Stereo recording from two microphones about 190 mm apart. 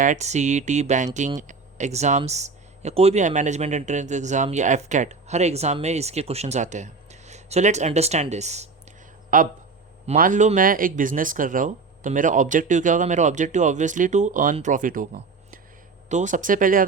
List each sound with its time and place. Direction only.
0.0 s speech: 40° right (ahead or behind)
9.3 s speech: 45° right (ahead or behind)